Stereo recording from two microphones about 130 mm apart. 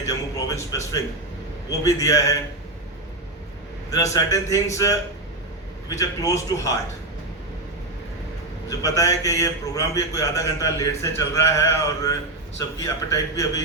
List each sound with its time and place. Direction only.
0.0 s a sound: 25° left (ahead or behind)
1.8 s a man's voice: 25° left (ahead or behind)
3.9 s a man's voice: 25° left (ahead or behind)
8.8 s a man's voice: 25° left (ahead or behind)